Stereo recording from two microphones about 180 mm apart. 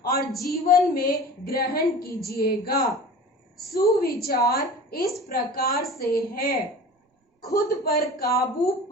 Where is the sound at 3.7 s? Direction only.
20° left (ahead or behind).